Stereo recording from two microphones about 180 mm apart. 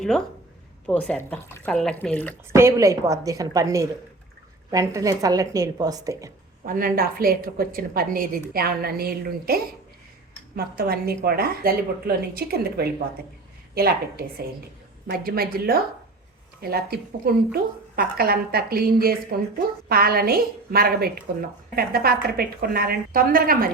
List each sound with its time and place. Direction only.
0.9 s speech: 5° left (ahead or behind)
2.5 s a woman's voice: 15° right (ahead or behind)
6.7 s a woman's voice: 50° right (ahead or behind)